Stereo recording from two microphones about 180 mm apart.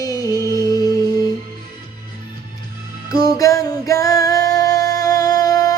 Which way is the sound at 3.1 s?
20° left (ahead or behind).